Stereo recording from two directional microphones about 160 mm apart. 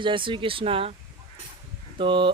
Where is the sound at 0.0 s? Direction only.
30° right (ahead or behind).